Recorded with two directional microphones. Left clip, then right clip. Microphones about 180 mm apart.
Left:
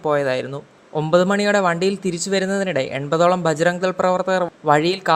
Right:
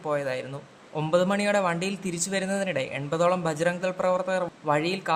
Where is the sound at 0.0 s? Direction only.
35° left (ahead or behind).